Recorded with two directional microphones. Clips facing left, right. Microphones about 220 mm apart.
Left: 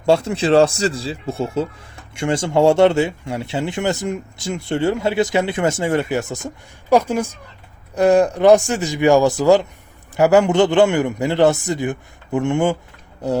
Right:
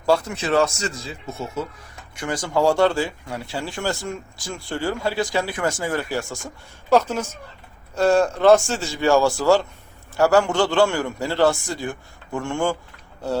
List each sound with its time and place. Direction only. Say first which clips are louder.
0.0 s speech: left 5 dB; 25° left (ahead or behind)